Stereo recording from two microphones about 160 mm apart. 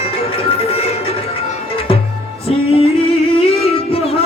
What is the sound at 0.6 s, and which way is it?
Music, 40° left (ahead or behind).